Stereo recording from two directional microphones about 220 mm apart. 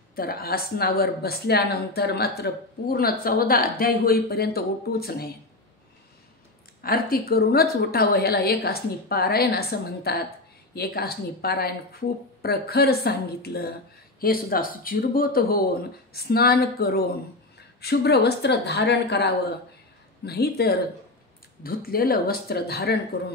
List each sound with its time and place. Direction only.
0.1 s speech: 45° left (ahead or behind)
6.8 s speech: 40° left (ahead or behind)